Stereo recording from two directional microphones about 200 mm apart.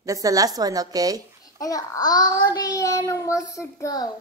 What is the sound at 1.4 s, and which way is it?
A child's voice, 15° left (ahead or behind).